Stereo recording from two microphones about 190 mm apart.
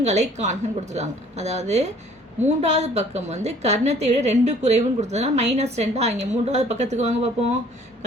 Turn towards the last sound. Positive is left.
turn(degrees=-35)  # may be behind; listen again after turning